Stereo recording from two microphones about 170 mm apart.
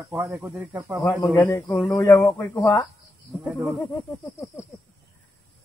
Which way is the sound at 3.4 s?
5° right (ahead or behind).